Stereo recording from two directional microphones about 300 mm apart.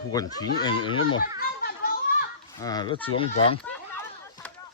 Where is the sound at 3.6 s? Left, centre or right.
Centre.